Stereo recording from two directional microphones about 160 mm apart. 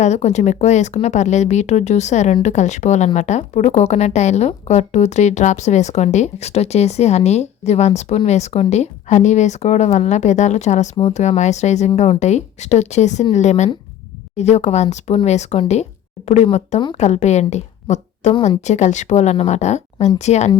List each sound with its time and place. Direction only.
0.0 s a woman's voice: 45° left (ahead or behind)